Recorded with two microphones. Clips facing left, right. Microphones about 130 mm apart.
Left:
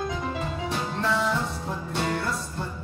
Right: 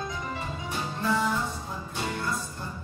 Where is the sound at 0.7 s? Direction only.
75° left (ahead or behind).